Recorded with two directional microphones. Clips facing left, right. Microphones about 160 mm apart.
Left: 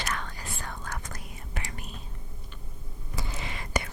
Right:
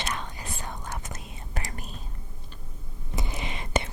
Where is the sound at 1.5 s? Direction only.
40° right (ahead or behind).